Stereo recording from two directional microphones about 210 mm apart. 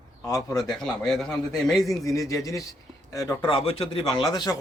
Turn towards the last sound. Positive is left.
turn(degrees=20)  # may be behind; listen again after turning